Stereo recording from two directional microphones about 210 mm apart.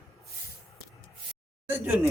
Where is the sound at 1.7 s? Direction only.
10° right (ahead or behind).